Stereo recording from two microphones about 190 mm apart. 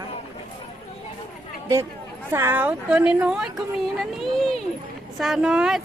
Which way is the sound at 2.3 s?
10° right (ahead or behind).